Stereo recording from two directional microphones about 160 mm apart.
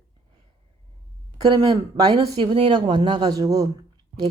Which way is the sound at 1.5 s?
25° right (ahead or behind).